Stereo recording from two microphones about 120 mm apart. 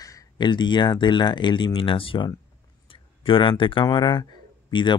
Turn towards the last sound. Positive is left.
turn(degrees=40)  # may be behind; listen again after turning